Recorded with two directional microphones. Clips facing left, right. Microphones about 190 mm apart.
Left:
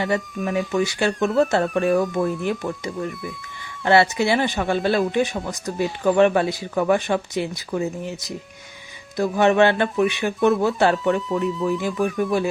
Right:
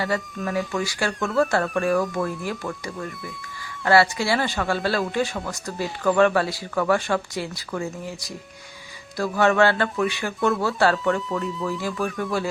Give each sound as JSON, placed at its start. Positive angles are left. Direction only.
{"t": 0.4, "sound": "speech", "side_deg": 20}
{"t": 11.4, "sound": "music", "side_deg": 0}
{"t": 11.8, "sound": "speech", "side_deg": 20}